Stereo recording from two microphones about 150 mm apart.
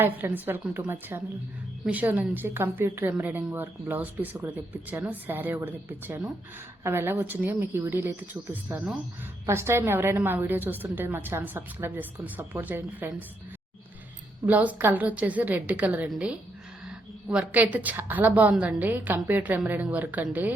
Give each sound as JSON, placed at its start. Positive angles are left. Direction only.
{"t": 0.0, "sound": "a woman's voice", "side_deg": -15}
{"t": 14.4, "sound": "a woman's voice", "side_deg": -10}